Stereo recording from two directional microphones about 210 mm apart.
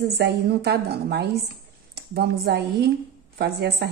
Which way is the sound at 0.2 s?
50° right (ahead or behind).